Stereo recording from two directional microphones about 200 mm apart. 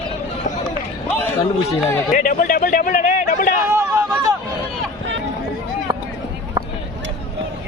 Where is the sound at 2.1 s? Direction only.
40° left (ahead or behind).